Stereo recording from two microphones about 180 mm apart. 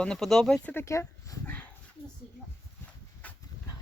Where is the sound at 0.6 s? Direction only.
15° left (ahead or behind).